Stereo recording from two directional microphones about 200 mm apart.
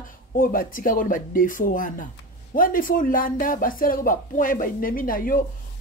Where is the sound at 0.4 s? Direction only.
45° left (ahead or behind).